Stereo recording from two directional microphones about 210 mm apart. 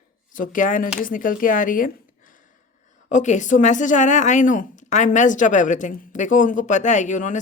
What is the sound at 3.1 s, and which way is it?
Speech, 35° left (ahead or behind).